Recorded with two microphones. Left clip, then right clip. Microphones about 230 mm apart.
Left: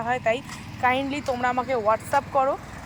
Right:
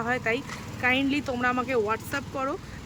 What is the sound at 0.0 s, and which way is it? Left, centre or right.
Speech, centre.